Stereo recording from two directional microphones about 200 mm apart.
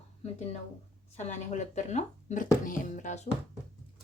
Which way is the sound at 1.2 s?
35° left (ahead or behind).